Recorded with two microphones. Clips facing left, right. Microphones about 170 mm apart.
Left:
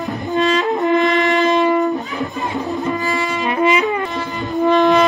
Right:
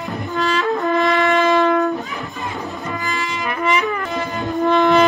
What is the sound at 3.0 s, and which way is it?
Brass instrument, 20° left (ahead or behind).